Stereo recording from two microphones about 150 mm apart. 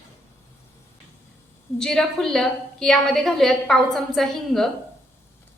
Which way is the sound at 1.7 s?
5° left (ahead or behind).